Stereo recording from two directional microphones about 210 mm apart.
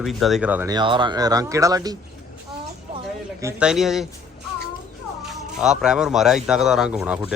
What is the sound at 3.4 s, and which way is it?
Speech, 5° right (ahead or behind).